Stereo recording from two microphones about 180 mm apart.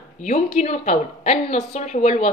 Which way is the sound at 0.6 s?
40° left (ahead or behind).